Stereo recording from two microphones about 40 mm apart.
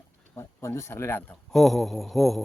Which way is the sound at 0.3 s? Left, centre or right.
Left.